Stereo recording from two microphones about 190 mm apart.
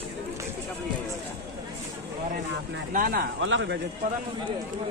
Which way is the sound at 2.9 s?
50° right (ahead or behind).